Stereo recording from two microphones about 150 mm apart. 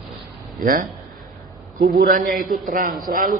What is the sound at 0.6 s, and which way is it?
Speech, 90° right.